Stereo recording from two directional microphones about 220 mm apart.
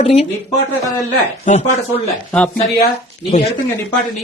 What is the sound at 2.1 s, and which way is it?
Speech, 5° left (ahead or behind).